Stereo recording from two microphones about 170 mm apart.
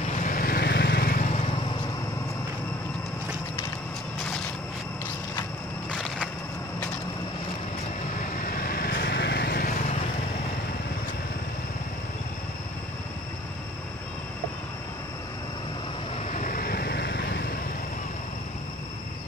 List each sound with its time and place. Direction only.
0.1 s vehicle: 50° left (ahead or behind)
5.9 s crushing: centre (ahead or behind)
8.2 s vehicle: 55° left (ahead or behind)
16.3 s vehicle: 50° left (ahead or behind); by 17.6 s 75° left (ahead or behind)